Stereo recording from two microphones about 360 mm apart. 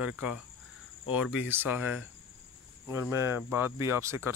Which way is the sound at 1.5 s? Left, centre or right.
Centre.